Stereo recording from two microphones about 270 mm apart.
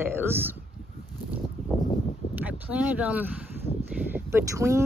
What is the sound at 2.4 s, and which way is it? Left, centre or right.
Speech, centre.